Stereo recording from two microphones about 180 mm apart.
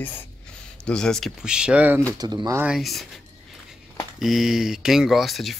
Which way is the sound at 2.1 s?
20° right (ahead or behind).